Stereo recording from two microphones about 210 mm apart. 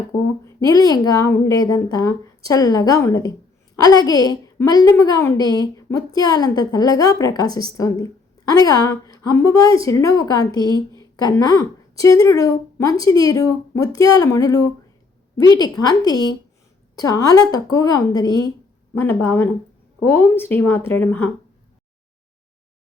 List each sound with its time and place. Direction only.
0.4 s a woman's voice: 20° left (ahead or behind)